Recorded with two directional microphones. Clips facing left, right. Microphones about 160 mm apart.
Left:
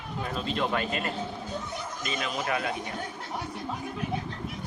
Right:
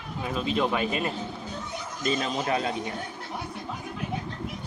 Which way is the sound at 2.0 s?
35° right (ahead or behind).